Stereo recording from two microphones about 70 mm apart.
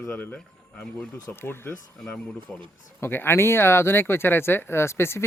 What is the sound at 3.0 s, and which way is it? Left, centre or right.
Speech, left.